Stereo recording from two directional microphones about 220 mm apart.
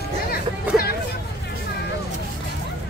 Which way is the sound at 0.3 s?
45° left (ahead or behind).